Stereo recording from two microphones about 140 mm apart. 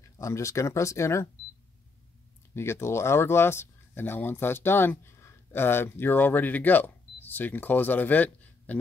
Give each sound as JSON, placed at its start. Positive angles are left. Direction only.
{"t": 0.2, "sound": "speech", "side_deg": 20}
{"t": 2.5, "sound": "speech", "side_deg": 20}